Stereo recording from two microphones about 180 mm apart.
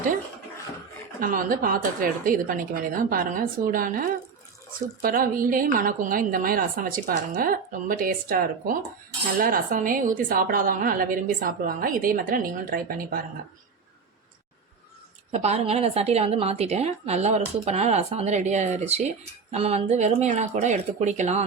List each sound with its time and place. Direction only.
1.2 s a woman's voice: 50° right (ahead or behind)
15.3 s a woman's voice: 35° right (ahead or behind)